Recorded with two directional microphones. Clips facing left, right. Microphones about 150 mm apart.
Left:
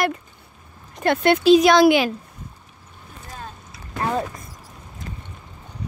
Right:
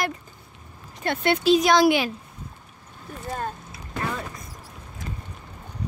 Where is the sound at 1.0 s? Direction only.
85° left.